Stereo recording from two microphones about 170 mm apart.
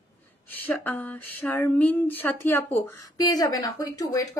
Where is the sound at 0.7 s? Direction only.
10° left (ahead or behind).